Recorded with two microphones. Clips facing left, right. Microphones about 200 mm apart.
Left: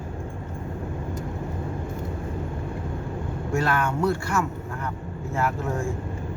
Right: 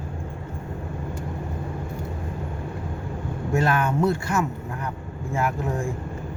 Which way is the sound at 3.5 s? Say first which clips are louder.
Right 2 dB; 20° right (ahead or behind).